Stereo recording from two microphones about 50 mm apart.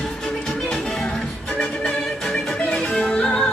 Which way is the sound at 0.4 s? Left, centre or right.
Centre.